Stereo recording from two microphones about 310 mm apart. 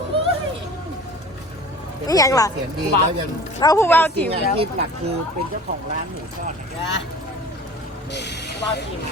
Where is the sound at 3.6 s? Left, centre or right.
Centre.